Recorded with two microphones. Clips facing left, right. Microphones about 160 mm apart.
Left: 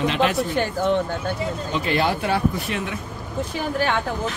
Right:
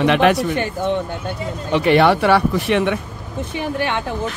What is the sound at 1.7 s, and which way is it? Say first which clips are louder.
Speech: right 9 dB; 70° right (ahead or behind).